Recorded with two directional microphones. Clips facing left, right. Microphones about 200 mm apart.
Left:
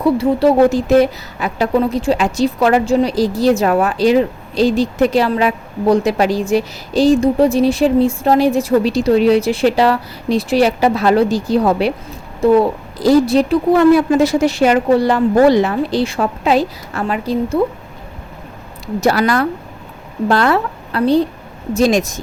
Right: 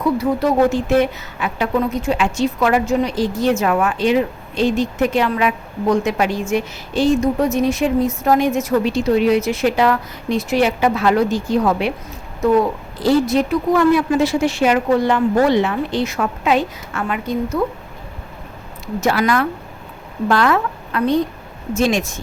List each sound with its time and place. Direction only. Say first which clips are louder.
0.0 s a woman's voice: left 5 dB; 30° left (ahead or behind)
18.9 s a woman's voice: left 3 dB; 35° left (ahead or behind)